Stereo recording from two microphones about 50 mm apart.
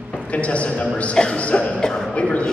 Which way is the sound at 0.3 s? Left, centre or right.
Left.